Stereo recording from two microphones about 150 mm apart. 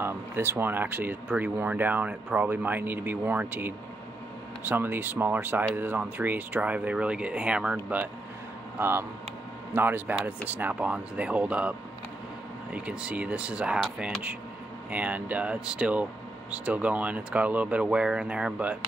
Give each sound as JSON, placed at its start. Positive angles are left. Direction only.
{"t": 0.0, "sound": "speech", "side_deg": -15}
{"t": 12.7, "sound": "speech", "side_deg": -10}